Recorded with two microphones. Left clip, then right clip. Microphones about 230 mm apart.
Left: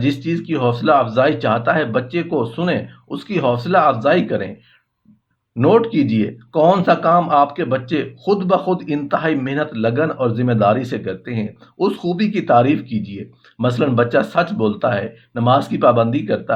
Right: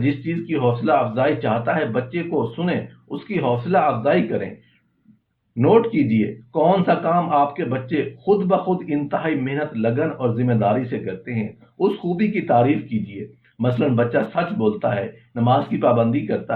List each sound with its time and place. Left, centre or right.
0.0 s speech: left
5.5 s speech: left